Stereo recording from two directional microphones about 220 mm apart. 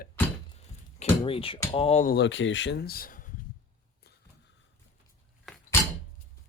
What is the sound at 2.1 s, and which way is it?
Speech, 55° left (ahead or behind).